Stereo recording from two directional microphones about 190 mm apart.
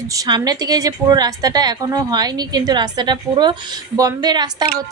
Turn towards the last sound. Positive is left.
turn(degrees=-20)  # may be behind; listen again after turning